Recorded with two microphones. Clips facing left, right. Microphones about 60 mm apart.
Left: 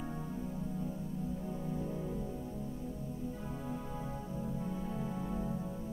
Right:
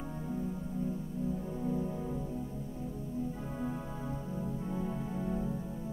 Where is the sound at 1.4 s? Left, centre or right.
Centre.